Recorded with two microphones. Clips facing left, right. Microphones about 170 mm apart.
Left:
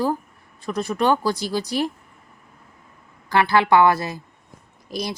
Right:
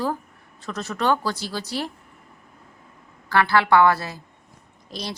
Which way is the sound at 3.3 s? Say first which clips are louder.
Left 1 dB; 15° left (ahead or behind).